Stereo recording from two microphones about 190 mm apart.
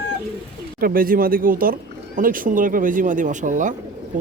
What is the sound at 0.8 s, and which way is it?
Speech, 50° right (ahead or behind).